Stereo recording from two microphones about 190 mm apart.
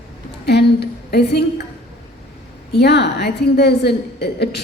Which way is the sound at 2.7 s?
60° left (ahead or behind).